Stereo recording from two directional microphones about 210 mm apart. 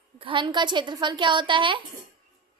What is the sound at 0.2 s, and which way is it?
A woman's voice, 25° right (ahead or behind).